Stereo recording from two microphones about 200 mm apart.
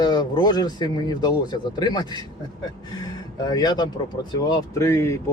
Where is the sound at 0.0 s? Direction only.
20° left (ahead or behind).